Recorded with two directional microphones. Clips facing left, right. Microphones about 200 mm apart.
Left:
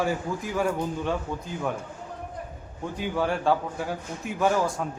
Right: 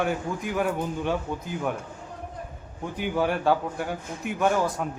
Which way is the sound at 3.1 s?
5° right (ahead or behind).